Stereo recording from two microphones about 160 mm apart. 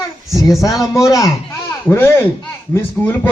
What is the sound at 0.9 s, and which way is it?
Speech, 20° left (ahead or behind).